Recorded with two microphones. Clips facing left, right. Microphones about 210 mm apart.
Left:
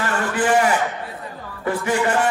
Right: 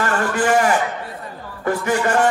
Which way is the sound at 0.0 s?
45° right (ahead or behind).